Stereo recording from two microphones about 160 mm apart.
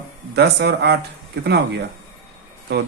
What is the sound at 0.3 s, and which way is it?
Speech, 90° right.